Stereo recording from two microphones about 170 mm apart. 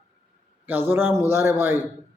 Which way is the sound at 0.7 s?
15° right (ahead or behind).